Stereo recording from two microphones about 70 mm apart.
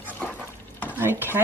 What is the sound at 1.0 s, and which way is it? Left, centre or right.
Stir, right.